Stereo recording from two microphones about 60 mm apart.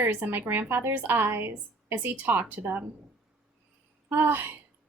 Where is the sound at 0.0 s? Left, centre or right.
Right.